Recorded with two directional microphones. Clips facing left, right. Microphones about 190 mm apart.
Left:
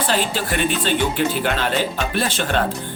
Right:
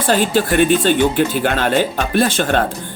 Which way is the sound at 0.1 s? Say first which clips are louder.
Right 10 dB; 45° right (ahead or behind).